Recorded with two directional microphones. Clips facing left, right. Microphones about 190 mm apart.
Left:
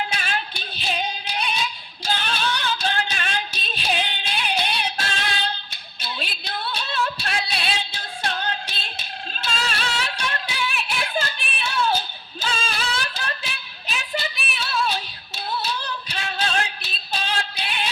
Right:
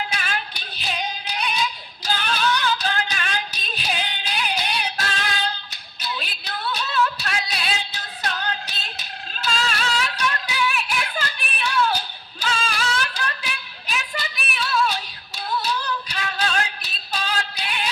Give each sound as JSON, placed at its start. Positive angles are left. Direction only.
{"t": 0.1, "sound": "female singing", "side_deg": 25}
{"t": 2.0, "sound": "a sound", "side_deg": 25}
{"t": 5.7, "sound": "music", "side_deg": 30}
{"t": 15.4, "sound": "female singing", "side_deg": 25}